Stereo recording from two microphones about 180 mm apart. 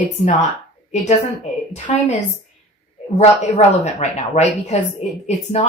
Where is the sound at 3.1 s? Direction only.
40° left (ahead or behind).